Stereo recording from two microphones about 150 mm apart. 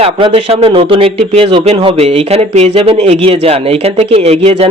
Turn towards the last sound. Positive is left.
turn(degrees=-45)  # may be behind; listen again after turning